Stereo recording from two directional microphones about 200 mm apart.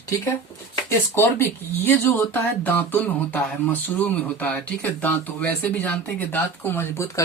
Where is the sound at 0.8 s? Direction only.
10° left (ahead or behind).